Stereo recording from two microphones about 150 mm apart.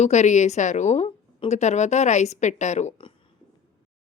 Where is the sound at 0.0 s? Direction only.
50° left (ahead or behind).